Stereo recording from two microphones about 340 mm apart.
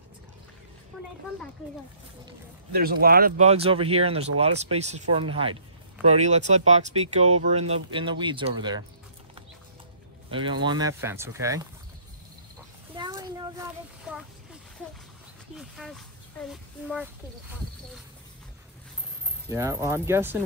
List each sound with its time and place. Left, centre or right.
2.7 s speech: right
10.3 s speech: centre
12.9 s a sound: centre
15.5 s a child's voice: centre
19.5 s speech: centre